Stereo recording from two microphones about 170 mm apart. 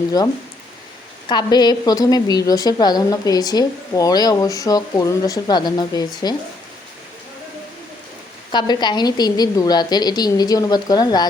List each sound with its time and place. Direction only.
1.3 s a woman's voice: 25° left (ahead or behind)
8.5 s a woman's voice: 25° left (ahead or behind)